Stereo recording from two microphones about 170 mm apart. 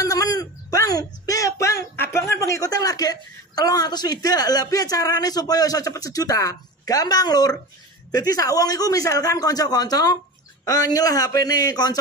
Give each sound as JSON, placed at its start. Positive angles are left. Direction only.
{"t": 0.0, "sound": "a man's voice", "side_deg": 20}